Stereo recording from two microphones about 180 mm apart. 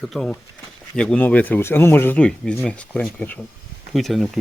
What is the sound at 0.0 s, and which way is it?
Speech, centre (ahead or behind).